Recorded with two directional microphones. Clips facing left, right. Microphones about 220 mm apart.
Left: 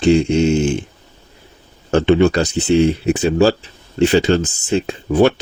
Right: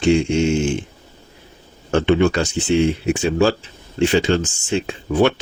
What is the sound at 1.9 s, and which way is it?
Speech, 35° left (ahead or behind).